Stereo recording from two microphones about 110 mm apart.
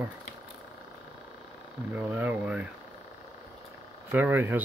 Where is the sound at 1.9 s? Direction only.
15° right (ahead or behind).